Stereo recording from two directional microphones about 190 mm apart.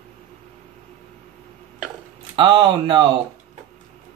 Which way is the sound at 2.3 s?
25° right (ahead or behind).